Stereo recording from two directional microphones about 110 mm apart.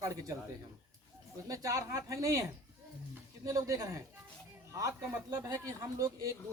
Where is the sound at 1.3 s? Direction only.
30° right (ahead or behind).